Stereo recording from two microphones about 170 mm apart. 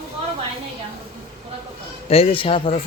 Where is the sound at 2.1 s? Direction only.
35° left (ahead or behind).